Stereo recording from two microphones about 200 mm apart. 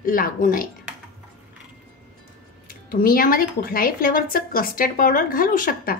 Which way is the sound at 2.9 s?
45° left (ahead or behind).